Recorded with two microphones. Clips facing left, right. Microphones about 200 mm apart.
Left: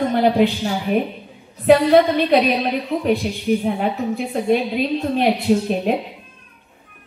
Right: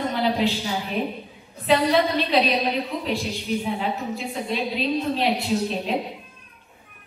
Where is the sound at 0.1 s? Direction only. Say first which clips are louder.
Left 7 dB; 55° left (ahead or behind).